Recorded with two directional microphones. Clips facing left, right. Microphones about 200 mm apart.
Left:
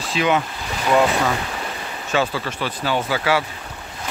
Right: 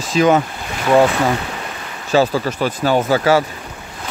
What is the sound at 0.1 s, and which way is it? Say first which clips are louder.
Speech: right 6 dB; 45° right (ahead or behind).